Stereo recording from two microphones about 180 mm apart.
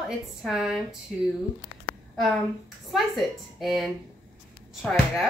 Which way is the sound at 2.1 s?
Centre (ahead or behind).